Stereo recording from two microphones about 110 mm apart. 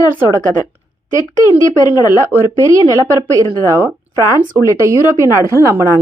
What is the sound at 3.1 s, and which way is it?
A woman's voice, 25° right (ahead or behind).